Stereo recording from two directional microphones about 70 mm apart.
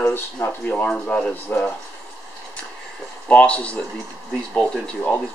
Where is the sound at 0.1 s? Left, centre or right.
Left.